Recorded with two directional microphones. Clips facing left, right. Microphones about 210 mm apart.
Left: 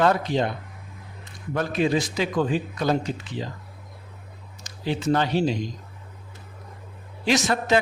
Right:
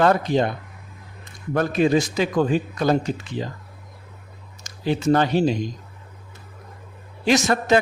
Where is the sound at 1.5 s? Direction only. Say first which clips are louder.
Right 4 dB; 50° right (ahead or behind).